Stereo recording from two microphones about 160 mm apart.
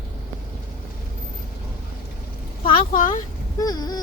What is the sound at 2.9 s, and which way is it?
Speech, 60° left (ahead or behind).